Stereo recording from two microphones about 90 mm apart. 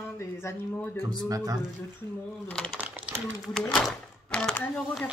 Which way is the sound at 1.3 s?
40° right (ahead or behind).